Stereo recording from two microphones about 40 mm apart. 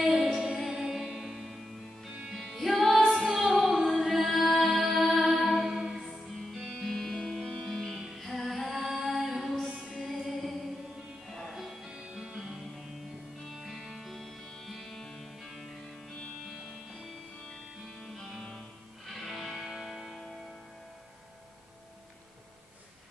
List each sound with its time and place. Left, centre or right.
0.0 s music: centre
5.7 s music: centre
6.8 s music: centre
7.5 s music: centre
9.0 s mantra: centre
9.7 s music: centre
11.9 s music: right
12.2 s music: centre
13.7 s music: centre
19.0 s music: centre
19.6 s music: centre